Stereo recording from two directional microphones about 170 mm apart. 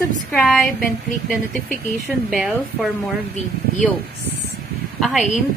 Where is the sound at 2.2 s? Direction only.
5° right (ahead or behind).